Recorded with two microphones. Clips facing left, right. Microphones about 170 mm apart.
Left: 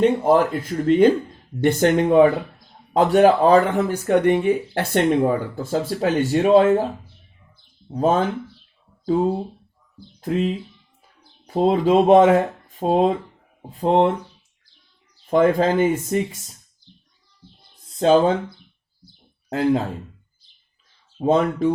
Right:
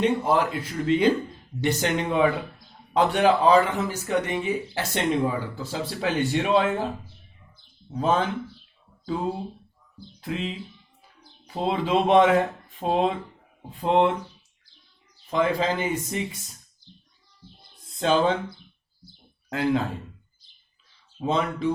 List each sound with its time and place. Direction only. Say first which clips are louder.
0.0 s speech: left 6 dB; 50° left (ahead or behind)
7.9 s speech: left 4 dB; 40° left (ahead or behind)
10.2 s speech: left 8 dB; 45° left (ahead or behind)
15.3 s speech: left 7 dB; 50° left (ahead or behind)
18.0 s speech: left 6 dB; 40° left (ahead or behind)
19.5 s speech: left 4 dB; 35° left (ahead or behind)
21.2 s speech: left 7 dB; 45° left (ahead or behind)